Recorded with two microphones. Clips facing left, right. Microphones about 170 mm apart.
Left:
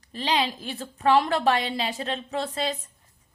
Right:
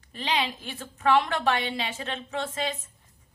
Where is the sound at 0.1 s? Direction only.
35° left (ahead or behind).